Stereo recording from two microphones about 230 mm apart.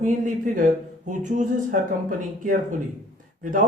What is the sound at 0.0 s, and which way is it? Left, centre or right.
Speech, right.